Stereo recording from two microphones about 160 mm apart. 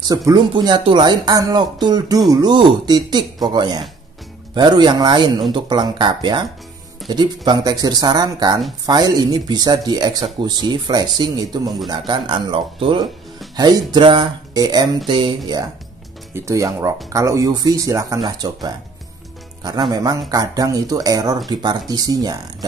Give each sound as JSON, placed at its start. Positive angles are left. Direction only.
{"t": 0.1, "sound": "speech", "side_deg": -25}